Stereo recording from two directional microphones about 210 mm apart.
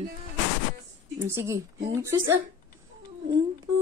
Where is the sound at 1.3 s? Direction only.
15° right (ahead or behind).